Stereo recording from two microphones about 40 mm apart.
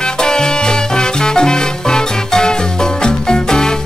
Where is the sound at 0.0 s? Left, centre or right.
Centre.